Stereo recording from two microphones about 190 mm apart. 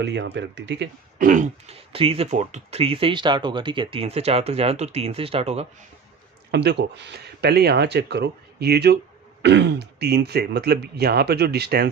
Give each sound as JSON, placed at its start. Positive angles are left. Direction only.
{"t": 0.0, "sound": "speech", "side_deg": -65}
{"t": 1.2, "sound": "speech", "side_deg": -45}
{"t": 6.5, "sound": "speech", "side_deg": -60}